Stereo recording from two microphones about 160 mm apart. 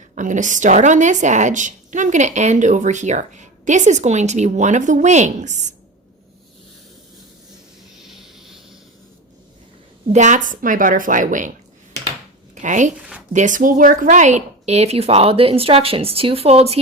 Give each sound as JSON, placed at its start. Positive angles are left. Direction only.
{"t": 0.2, "sound": "a woman's voice", "side_deg": -50}
{"t": 8.0, "sound": "vehicle", "side_deg": 0}
{"t": 10.1, "sound": "a woman's voice", "side_deg": -50}
{"t": 12.5, "sound": "speech", "side_deg": -50}